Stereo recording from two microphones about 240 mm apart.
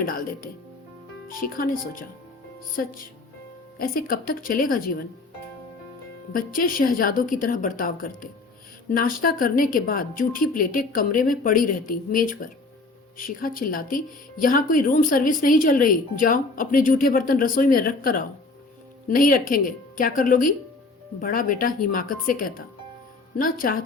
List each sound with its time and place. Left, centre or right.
0.1 s speech: left
3.8 s speech: left
6.3 s speech: left